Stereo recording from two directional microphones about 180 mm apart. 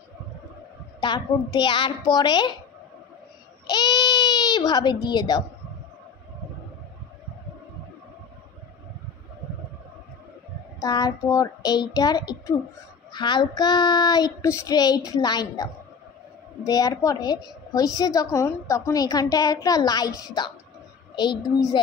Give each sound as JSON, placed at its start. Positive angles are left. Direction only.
{"t": 1.0, "sound": "a woman's voice", "side_deg": 25}
{"t": 3.6, "sound": "baby cry", "side_deg": 25}
{"t": 5.0, "sound": "a woman's voice", "side_deg": 25}
{"t": 10.8, "sound": "a woman's voice", "side_deg": 20}
{"t": 21.1, "sound": "a sound", "side_deg": 25}